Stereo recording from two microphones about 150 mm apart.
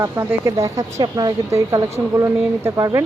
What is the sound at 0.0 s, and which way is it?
Speech, 20° right (ahead or behind).